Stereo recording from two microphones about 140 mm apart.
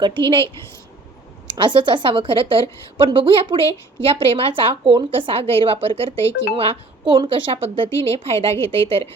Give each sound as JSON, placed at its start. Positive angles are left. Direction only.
{"t": 0.2, "sound": "a woman's voice", "side_deg": -40}
{"t": 1.5, "sound": "a woman's voice", "side_deg": -35}